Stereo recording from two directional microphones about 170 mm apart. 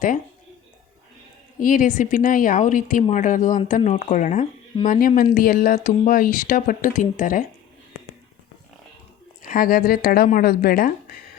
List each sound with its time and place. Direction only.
1.5 s speech: 50° left (ahead or behind)
9.4 s speech: 55° left (ahead or behind)